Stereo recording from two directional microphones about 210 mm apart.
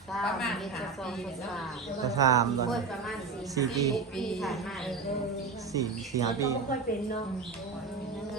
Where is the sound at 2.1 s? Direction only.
15° right (ahead or behind).